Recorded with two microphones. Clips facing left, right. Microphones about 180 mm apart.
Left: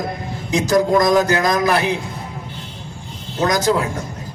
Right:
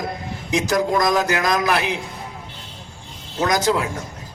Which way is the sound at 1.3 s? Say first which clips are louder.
Left 3 dB; 35° left (ahead or behind).